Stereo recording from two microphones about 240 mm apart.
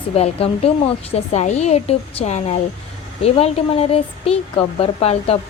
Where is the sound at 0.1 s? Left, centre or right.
Left.